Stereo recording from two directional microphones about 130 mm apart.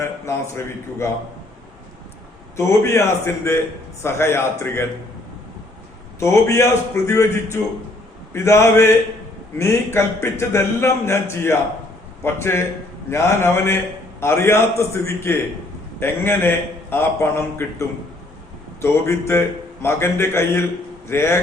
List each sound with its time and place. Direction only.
0.3 s a man's voice: 20° left (ahead or behind)
2.6 s a man's voice: 20° left (ahead or behind)
6.1 s a man's voice: 20° left (ahead or behind)